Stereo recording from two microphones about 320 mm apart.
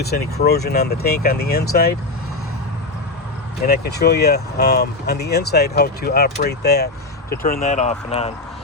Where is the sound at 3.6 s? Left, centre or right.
Left.